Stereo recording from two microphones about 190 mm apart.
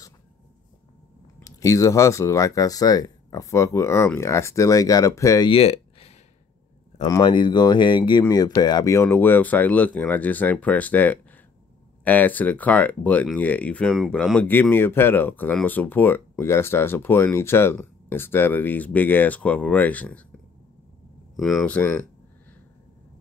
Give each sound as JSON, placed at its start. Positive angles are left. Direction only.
{"t": 1.4, "sound": "speech", "side_deg": 15}
{"t": 5.5, "sound": "a sound", "side_deg": 30}
{"t": 7.1, "sound": "speech", "side_deg": 25}
{"t": 21.4, "sound": "speech", "side_deg": 0}